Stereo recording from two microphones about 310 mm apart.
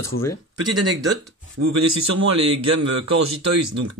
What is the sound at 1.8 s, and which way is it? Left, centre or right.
Speech, right.